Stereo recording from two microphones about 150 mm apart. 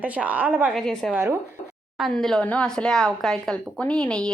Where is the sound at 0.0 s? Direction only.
10° right (ahead or behind).